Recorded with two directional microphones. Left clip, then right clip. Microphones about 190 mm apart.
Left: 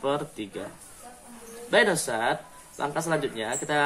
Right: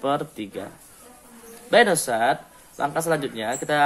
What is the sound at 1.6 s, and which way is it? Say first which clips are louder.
Speech: right 5 dB; 50° right (ahead or behind).